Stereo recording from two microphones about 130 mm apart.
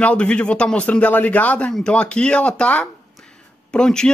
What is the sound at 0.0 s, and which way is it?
A man's voice, 10° left (ahead or behind).